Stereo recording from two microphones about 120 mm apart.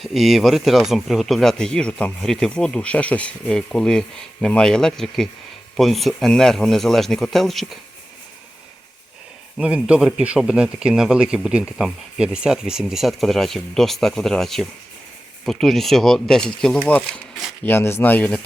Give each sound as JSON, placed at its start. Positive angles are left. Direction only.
{"t": 0.0, "sound": "speech", "side_deg": 0}
{"t": 9.6, "sound": "speech", "side_deg": -10}